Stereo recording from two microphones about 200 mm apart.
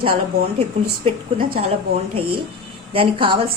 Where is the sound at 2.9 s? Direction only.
25° right (ahead or behind).